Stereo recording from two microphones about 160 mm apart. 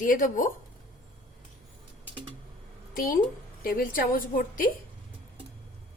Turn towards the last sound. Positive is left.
turn(degrees=60)  # may be behind; listen again after turning